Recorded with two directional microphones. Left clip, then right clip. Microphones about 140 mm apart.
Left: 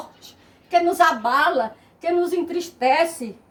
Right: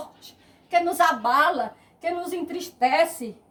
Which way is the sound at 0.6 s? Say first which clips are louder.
Left 3 dB; 30° right (ahead or behind).